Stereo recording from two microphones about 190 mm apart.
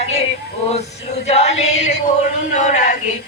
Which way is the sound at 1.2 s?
35° left (ahead or behind).